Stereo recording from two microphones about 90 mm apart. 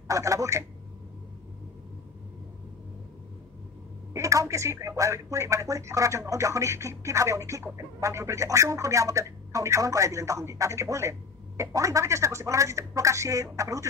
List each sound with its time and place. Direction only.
0.1 s speech: 35° right (ahead or behind)
4.1 s speech: 35° right (ahead or behind)